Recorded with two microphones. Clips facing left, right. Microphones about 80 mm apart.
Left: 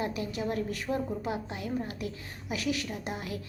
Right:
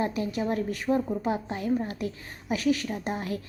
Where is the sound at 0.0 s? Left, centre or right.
Right.